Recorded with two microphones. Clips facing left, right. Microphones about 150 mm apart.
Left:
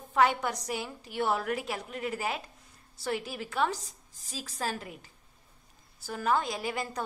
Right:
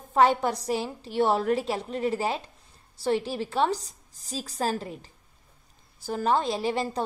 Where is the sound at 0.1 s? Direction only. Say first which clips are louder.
Right 5 dB; 35° right (ahead or behind).